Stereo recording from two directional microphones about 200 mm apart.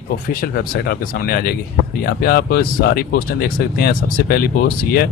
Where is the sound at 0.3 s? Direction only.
50° left (ahead or behind).